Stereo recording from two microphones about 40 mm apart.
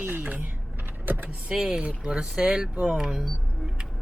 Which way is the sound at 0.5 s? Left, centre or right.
Right.